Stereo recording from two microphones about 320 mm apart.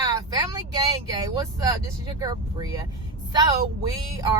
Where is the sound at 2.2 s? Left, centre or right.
Centre.